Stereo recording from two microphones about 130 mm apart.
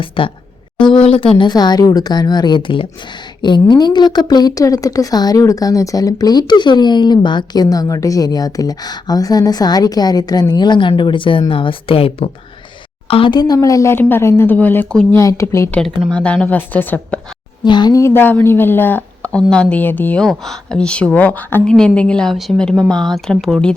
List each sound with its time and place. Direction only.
0.0 s speech: 40° left (ahead or behind); by 15.0 s 10° left (ahead or behind)
15.1 s speech: 25° left (ahead or behind)
16.0 s speech: 5° left (ahead or behind)
17.6 s speech: 35° left (ahead or behind); by 20.2 s 15° left (ahead or behind)
20.2 s speech: 5° left (ahead or behind)